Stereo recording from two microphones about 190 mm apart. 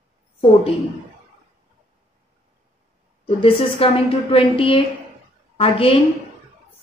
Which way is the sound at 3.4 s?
30° left (ahead or behind).